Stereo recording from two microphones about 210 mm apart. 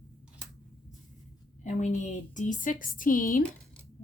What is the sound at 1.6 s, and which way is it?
Speech, 35° left (ahead or behind).